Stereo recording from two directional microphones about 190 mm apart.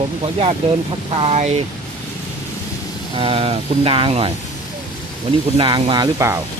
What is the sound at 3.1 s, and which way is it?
Speech, 30° right (ahead or behind).